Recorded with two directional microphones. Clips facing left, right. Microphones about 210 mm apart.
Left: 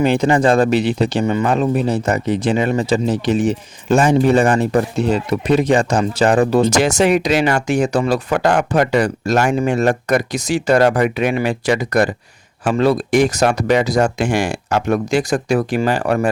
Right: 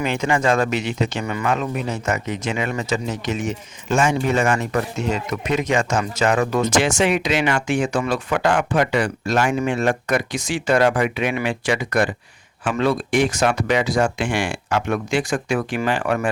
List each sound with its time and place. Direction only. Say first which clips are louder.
0.0 s speech: left 6 dB; 35° left (ahead or behind)